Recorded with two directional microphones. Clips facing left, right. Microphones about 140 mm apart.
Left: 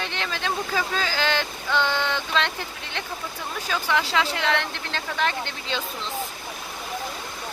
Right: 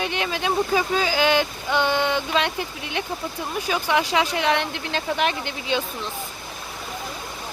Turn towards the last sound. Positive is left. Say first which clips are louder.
# right 4 dB
turn(degrees=-15)  # may be behind; listen again after turning